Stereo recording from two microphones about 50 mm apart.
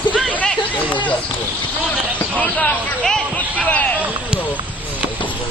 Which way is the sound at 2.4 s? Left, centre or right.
Left.